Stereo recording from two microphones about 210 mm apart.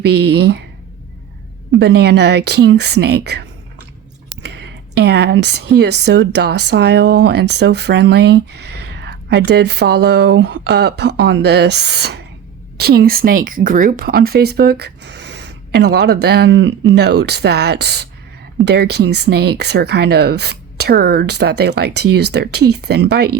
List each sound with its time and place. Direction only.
0.0 s speech: 50° right (ahead or behind)
1.8 s speech: 50° right (ahead or behind)
4.4 s a sound: 50° right (ahead or behind)
5.7 s speech: 50° right (ahead or behind)